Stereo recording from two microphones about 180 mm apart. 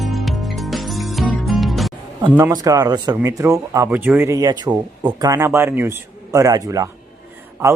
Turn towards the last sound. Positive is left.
turn(degrees=-15)  # may be behind; listen again after turning